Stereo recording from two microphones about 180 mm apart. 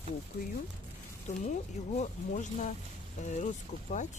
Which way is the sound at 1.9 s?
40° left (ahead or behind).